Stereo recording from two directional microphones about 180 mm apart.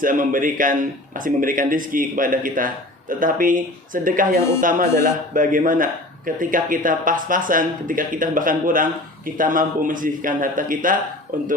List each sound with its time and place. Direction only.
0.0 s speech: 50° right (ahead or behind)